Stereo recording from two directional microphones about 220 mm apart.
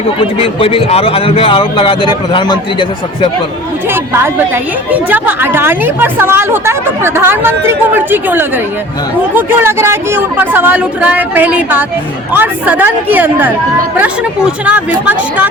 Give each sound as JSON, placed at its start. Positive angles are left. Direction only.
{"t": 0.2, "sound": "a man's voice", "side_deg": 25}
{"t": 3.9, "sound": "a woman's voice", "side_deg": -10}